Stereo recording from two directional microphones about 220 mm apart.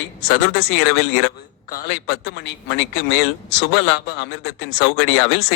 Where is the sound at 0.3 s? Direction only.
50° left (ahead or behind).